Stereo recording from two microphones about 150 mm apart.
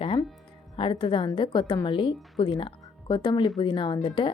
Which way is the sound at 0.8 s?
35° left (ahead or behind).